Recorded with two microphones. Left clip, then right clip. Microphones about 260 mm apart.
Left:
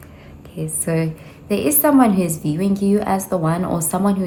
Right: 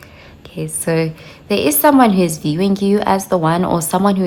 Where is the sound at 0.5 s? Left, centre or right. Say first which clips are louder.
Right 5 dB; centre.